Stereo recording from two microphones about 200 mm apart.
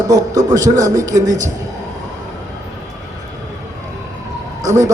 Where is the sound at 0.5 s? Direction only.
15° right (ahead or behind).